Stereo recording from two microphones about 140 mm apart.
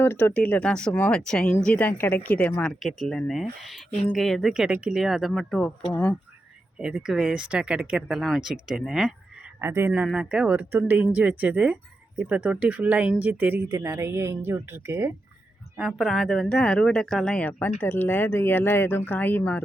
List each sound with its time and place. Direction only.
0.0 s speech: 15° left (ahead or behind)
6.7 s speech: 5° right (ahead or behind)
9.6 s speech: 20° right (ahead or behind)
15.8 s speech: centre (ahead or behind)